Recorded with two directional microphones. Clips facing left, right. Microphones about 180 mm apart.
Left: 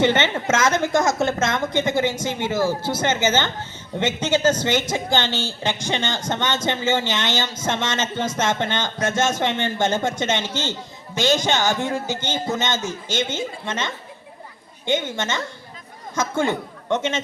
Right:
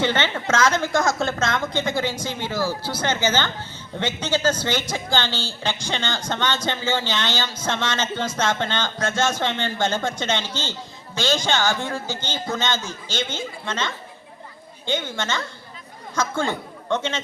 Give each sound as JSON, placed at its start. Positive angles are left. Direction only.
{"t": 0.0, "sound": "a man's voice", "side_deg": 20}